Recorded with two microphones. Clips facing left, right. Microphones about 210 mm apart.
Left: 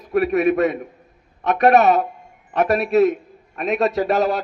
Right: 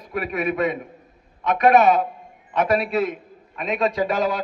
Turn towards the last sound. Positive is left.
turn(degrees=45)  # may be behind; listen again after turning